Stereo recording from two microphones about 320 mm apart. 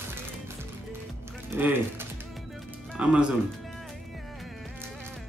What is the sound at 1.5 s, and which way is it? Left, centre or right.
Speech, centre.